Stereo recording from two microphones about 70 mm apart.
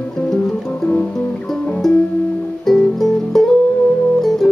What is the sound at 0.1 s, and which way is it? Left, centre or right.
Music, centre.